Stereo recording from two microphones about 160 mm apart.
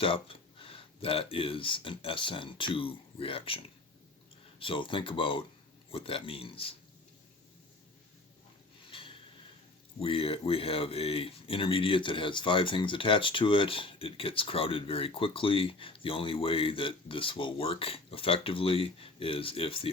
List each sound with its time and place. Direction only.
0.0 s speech: 35° left (ahead or behind)
4.6 s speech: 35° left (ahead or behind)
8.9 s a sound: 35° left (ahead or behind)
10.0 s speech: 35° left (ahead or behind)